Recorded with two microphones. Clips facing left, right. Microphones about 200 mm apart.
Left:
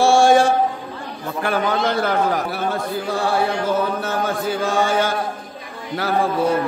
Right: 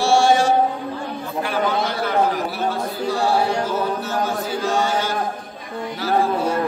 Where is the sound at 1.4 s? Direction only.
50° left (ahead or behind).